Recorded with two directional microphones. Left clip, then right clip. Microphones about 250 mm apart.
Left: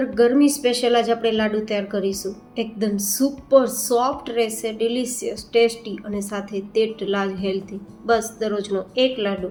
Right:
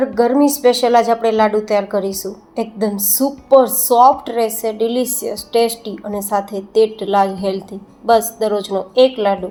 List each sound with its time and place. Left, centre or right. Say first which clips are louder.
0.2 s a woman's voice: right 2 dB; centre
9.1 s a woman's voice: right 8 dB; right